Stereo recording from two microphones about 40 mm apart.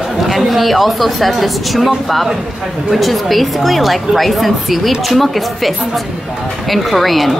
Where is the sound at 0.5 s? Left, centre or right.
Centre.